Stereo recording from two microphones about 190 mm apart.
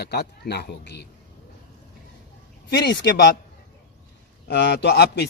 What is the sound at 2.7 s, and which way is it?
Speech, 70° left (ahead or behind).